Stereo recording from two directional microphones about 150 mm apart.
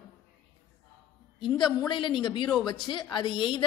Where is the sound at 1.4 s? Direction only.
30° left (ahead or behind).